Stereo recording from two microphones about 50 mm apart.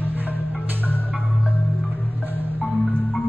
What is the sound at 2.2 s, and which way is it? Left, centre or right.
Marimba, right.